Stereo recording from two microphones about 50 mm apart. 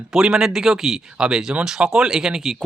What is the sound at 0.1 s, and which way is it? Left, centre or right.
Speech, centre.